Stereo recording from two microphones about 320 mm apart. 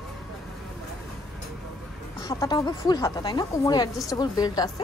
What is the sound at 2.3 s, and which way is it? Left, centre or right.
A woman's voice, centre.